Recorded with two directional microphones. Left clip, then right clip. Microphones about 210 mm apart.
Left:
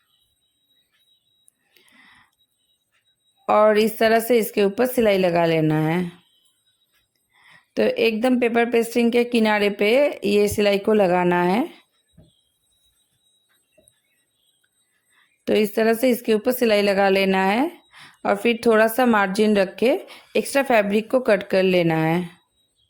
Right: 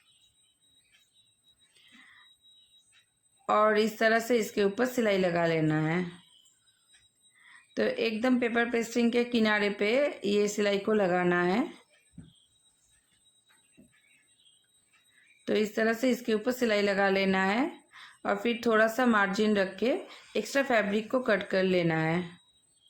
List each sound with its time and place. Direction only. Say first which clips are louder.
3.4 s speech: left 8 dB; 35° left (ahead or behind)
7.3 s speech: left 9 dB; 35° left (ahead or behind)
15.4 s speech: left 9 dB; 35° left (ahead or behind)